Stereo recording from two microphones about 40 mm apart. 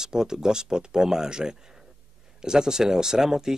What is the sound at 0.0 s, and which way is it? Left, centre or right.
Speech, centre.